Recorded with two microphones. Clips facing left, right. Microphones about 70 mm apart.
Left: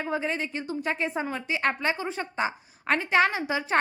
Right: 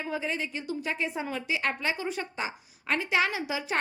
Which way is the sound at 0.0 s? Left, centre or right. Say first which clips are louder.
Left 3 dB; left.